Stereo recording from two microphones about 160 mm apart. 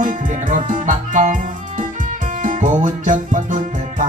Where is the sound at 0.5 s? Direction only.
50° right (ahead or behind).